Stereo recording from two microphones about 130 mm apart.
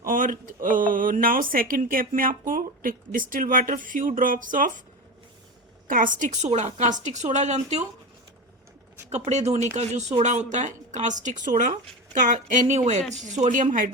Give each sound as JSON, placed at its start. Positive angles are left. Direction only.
{"t": 0.0, "sound": "speech", "side_deg": -90}
{"t": 5.9, "sound": "speech", "side_deg": -85}
{"t": 9.0, "sound": "speech", "side_deg": -55}
{"t": 12.2, "sound": "speech", "side_deg": -75}